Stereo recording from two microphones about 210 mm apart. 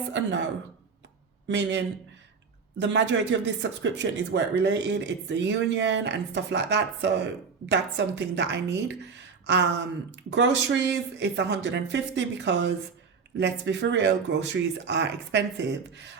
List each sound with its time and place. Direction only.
1.5 s speech: 55° right (ahead or behind)